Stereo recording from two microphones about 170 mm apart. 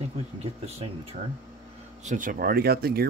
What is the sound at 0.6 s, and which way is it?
Speech, 35° right (ahead or behind).